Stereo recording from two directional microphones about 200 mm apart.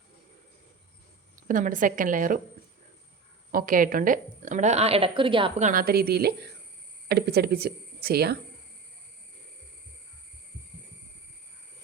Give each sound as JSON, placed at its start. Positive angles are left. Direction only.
{"t": 1.5, "sound": "a woman's voice", "side_deg": -40}
{"t": 3.5, "sound": "a woman's voice", "side_deg": -45}
{"t": 5.6, "sound": "a woman's voice", "side_deg": -45}